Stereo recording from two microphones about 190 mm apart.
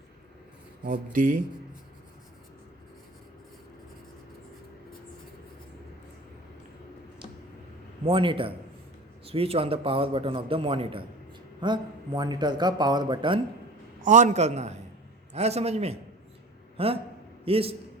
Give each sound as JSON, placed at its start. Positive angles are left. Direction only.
{"t": 1.1, "sound": "speech", "side_deg": -45}
{"t": 8.0, "sound": "a man's voice", "side_deg": -25}
{"t": 14.0, "sound": "a man's voice", "side_deg": -40}